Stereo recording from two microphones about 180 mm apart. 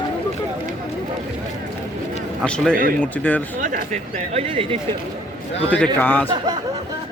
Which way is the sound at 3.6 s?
45° right (ahead or behind).